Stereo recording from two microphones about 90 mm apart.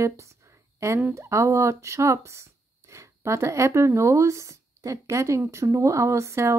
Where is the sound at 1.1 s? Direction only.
35° right (ahead or behind).